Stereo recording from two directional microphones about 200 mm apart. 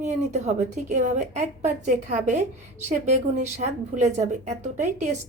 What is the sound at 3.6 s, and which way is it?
A woman's voice, 35° right (ahead or behind).